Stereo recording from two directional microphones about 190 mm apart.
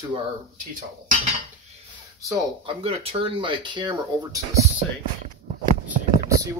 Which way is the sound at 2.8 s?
30° right (ahead or behind).